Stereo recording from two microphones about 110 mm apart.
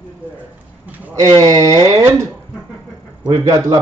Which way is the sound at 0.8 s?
15° right (ahead or behind).